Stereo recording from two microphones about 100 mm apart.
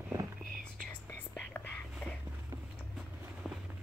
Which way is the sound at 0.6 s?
10° left (ahead or behind).